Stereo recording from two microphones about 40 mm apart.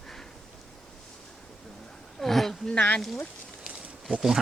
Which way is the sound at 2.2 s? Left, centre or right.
Centre.